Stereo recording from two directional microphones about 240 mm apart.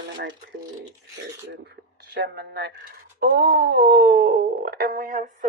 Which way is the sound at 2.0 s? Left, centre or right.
Right.